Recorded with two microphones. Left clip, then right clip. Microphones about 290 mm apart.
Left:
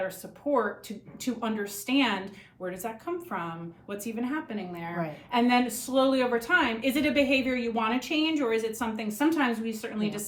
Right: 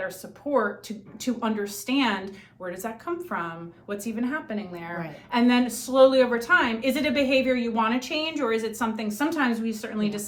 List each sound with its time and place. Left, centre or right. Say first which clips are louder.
1.2 s a woman's voice: right 4 dB; centre